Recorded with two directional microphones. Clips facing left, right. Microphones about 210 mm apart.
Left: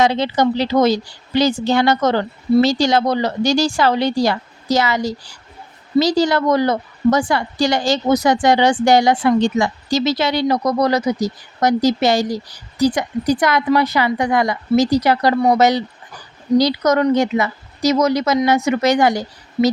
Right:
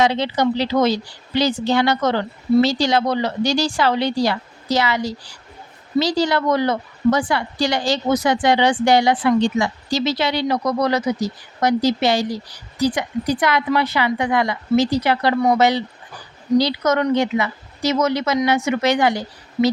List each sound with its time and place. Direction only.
0.0 s a woman's voice: 45° left (ahead or behind)